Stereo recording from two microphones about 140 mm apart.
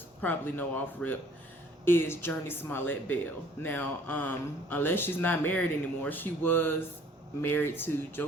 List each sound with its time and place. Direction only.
0.2 s speech: 15° left (ahead or behind)